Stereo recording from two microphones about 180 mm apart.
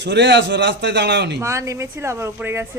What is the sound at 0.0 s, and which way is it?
A man's voice, 75° right (ahead or behind).